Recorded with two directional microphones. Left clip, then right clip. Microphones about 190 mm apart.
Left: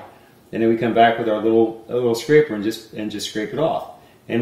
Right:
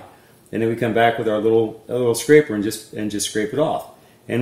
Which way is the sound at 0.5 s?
25° right (ahead or behind).